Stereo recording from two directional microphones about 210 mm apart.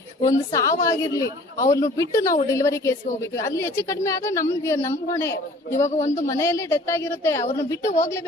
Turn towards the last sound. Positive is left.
turn(degrees=15)  # may be behind; listen again after turning